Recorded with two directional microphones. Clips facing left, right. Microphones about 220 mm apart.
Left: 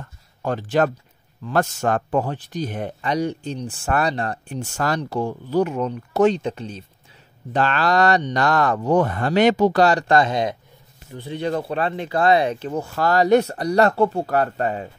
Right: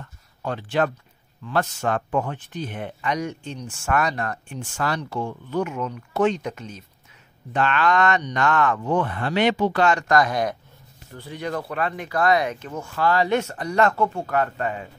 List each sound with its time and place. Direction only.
0.4 s speech: 45° left (ahead or behind)